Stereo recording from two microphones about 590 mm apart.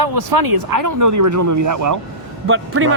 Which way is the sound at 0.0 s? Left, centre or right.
Right.